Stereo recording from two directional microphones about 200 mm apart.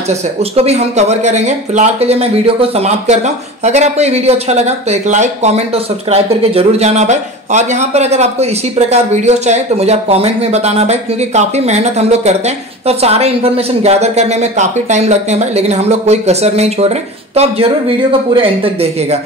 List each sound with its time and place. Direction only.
0.1 s speech: 30° right (ahead or behind)